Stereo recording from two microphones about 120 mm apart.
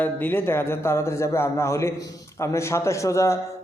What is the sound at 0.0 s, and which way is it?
A man's voice, 15° left (ahead or behind).